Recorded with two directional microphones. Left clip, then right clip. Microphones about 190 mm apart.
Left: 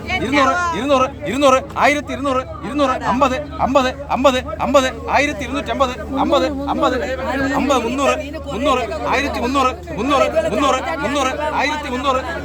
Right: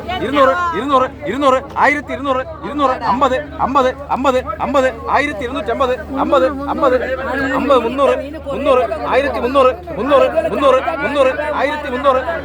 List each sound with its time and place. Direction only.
0.3 s a man's voice: 55° left (ahead or behind)
3.0 s a man's voice: 50° left (ahead or behind)